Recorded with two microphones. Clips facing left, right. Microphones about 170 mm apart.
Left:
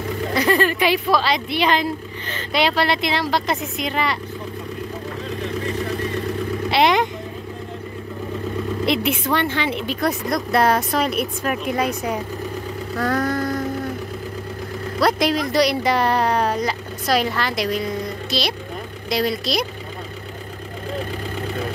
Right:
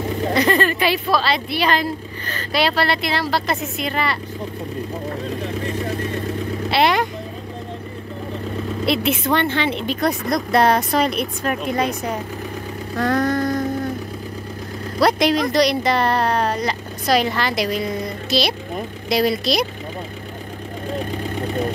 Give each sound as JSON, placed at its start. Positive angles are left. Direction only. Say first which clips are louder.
{"t": 0.4, "sound": "a woman's voice", "louder": "left 1 dB", "side_deg": 10}
{"t": 6.7, "sound": "vehicle", "louder": "even", "side_deg": 15}
{"t": 8.8, "sound": "a woman's voice", "louder": "right 2 dB", "side_deg": 15}
{"t": 15.0, "sound": "speech", "louder": "right 2 dB", "side_deg": 0}